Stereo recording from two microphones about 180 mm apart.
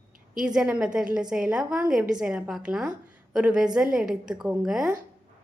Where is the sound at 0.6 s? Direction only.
5° right (ahead or behind).